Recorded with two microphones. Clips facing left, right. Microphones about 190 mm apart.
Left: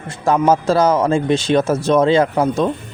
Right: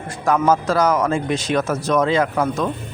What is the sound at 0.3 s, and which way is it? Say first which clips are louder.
Speech: left 3 dB; 25° left (ahead or behind).